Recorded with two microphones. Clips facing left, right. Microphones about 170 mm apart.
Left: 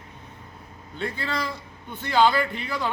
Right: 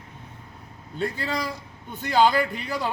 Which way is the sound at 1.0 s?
40° right (ahead or behind).